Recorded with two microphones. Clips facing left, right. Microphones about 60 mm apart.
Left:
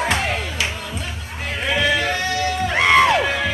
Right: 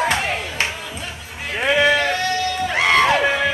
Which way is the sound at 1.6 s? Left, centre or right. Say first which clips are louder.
Right 4 dB; centre.